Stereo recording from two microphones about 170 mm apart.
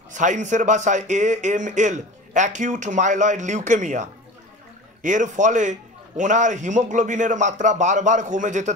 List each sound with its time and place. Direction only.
0.1 s speech: 45° right (ahead or behind)